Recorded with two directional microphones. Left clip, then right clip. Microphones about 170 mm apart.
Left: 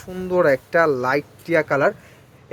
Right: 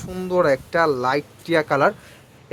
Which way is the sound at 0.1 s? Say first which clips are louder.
Left 1 dB; 5° right (ahead or behind).